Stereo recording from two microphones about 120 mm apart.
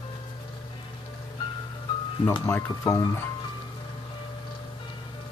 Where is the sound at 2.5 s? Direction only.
25° left (ahead or behind).